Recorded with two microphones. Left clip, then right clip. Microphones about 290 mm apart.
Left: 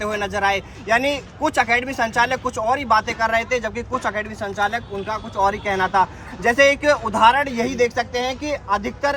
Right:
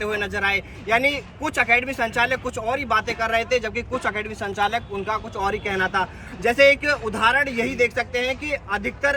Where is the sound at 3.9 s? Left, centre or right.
Centre.